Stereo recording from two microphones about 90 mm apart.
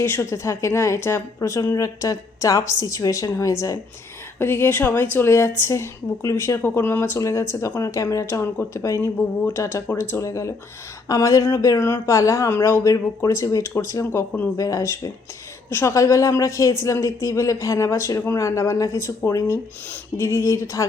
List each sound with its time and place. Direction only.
0.0 s a woman's voice: 25° left (ahead or behind)
4.4 s a woman's voice: 25° left (ahead or behind)
6.6 s a woman's voice: 25° left (ahead or behind)
14.5 s a woman's voice: 40° left (ahead or behind)